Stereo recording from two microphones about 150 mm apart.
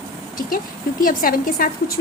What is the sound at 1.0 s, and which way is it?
Speech, 70° left (ahead or behind).